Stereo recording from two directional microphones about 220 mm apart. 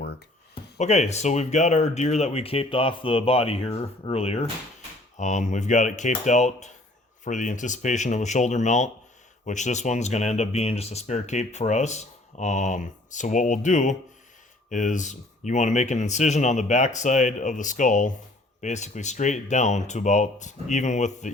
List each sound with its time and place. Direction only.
0.5 s speech: 30° left (ahead or behind)